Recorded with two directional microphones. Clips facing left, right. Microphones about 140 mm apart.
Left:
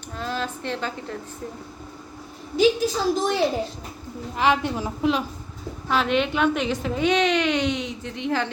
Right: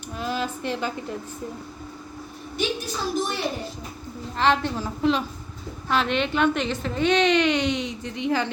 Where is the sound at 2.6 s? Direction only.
90° left.